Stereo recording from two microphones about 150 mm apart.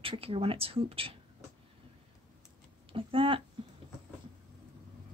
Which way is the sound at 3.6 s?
35° right (ahead or behind).